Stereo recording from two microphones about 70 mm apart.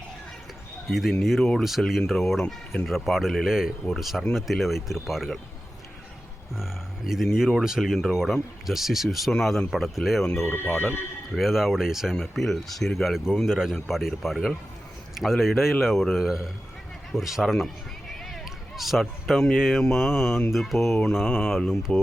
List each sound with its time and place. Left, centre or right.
0.9 s speech: centre
6.6 s speech: centre
10.3 s speech: left
11.3 s speech: centre
18.1 s bleat: centre
19.5 s speech: centre
21.7 s speech: centre